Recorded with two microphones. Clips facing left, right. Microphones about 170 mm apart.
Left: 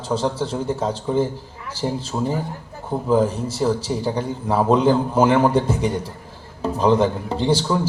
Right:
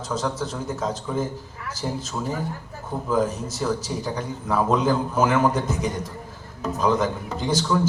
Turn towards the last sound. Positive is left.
turn(degrees=30)  # may be behind; listen again after turning